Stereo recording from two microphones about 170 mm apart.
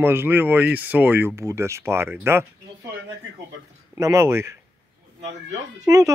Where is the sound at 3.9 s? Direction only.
15° right (ahead or behind).